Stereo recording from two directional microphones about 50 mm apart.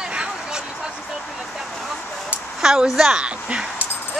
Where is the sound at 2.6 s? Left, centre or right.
Centre.